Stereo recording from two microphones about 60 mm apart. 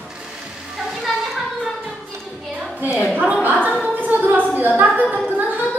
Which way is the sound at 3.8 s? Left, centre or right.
Right.